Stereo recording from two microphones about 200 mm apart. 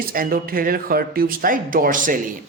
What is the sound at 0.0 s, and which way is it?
Speech, 45° right (ahead or behind).